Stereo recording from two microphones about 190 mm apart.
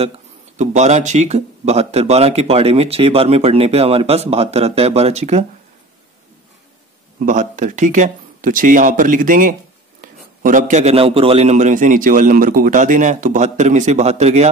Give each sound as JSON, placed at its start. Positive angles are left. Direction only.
{"t": 0.6, "sound": "speech", "side_deg": -40}
{"t": 7.2, "sound": "speech", "side_deg": -40}